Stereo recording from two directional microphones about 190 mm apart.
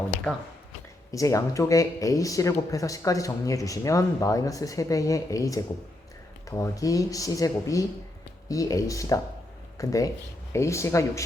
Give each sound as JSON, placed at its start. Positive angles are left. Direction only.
{"t": 1.1, "sound": "speech", "side_deg": 15}